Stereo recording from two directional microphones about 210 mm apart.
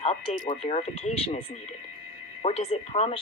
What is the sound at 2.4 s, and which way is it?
Speech, 30° left (ahead or behind).